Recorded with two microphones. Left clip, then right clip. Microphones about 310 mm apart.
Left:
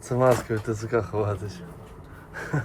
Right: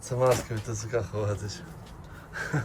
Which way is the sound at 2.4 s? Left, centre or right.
Centre.